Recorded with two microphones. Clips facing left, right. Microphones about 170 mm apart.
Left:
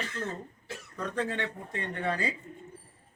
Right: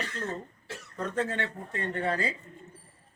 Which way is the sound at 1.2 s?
15° left (ahead or behind).